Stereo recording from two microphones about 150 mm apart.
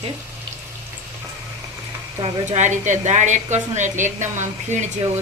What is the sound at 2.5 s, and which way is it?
A woman's voice, 50° right (ahead or behind).